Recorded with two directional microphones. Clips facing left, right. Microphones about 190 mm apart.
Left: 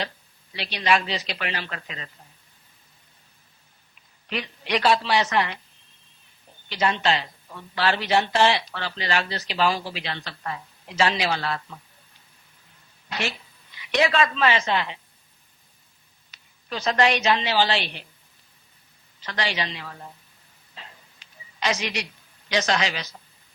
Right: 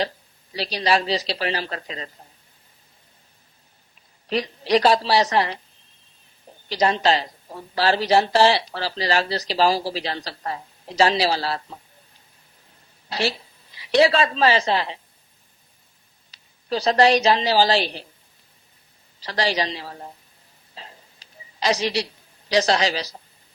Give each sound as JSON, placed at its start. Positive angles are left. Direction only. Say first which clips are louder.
{"t": 0.5, "sound": "speech", "louder": "right 2 dB", "side_deg": -35}
{"t": 4.3, "sound": "speech", "louder": "right 7 dB", "side_deg": -35}
{"t": 6.7, "sound": "speech", "louder": "right 4 dB", "side_deg": -35}
{"t": 13.1, "sound": "a woman's voice", "louder": "right 5 dB", "side_deg": -35}
{"t": 16.3, "sound": "a man's voice", "louder": "right 7 dB", "side_deg": -35}
{"t": 19.2, "sound": "speech", "louder": "right 5 dB", "side_deg": -35}
{"t": 20.7, "sound": "a sound", "louder": "right 3 dB", "side_deg": -35}